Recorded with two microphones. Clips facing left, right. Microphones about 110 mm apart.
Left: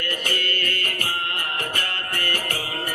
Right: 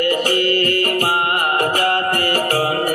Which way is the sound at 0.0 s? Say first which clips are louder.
Right 11 dB; 60° right (ahead or behind).